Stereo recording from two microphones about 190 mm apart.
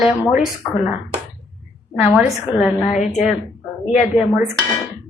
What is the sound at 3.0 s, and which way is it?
Speech, 40° left (ahead or behind).